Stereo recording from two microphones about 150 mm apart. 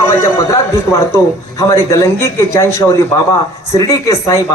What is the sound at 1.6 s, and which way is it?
A man's voice, 20° left (ahead or behind).